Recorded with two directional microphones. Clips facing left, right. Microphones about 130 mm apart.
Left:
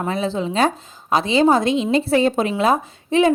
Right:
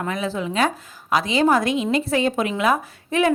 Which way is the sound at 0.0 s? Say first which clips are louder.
Left 3 dB; 30° left (ahead or behind).